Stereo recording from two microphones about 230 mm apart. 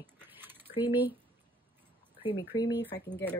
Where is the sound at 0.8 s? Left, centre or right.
Centre.